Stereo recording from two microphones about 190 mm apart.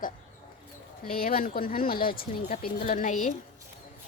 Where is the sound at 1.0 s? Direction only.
50° left (ahead or behind).